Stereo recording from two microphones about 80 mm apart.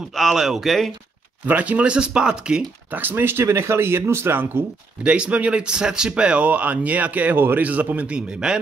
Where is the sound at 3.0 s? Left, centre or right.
Right.